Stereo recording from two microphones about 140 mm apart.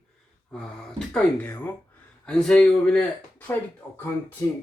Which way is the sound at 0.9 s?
10° left (ahead or behind).